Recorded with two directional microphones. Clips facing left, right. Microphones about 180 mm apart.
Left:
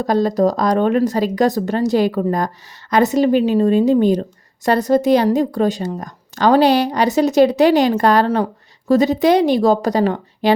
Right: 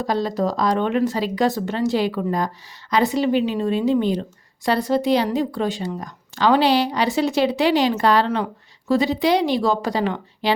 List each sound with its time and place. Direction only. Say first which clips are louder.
0.0 s a woman's voice: left 6 dB; 45° left (ahead or behind)